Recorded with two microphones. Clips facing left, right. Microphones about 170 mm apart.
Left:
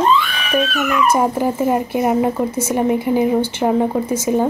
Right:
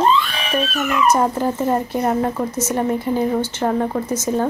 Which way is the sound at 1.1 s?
10° left (ahead or behind).